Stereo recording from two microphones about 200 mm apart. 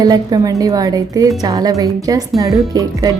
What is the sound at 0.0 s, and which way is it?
A woman's voice, 20° right (ahead or behind).